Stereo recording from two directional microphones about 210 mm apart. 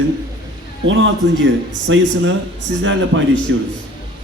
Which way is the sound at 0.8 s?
65° right (ahead or behind).